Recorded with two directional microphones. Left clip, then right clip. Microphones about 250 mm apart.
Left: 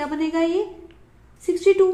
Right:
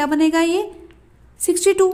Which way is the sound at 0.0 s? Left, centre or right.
Right.